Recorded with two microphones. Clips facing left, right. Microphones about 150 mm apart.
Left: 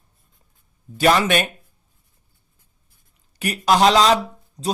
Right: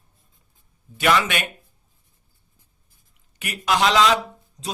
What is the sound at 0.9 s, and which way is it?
Speech, 35° left (ahead or behind).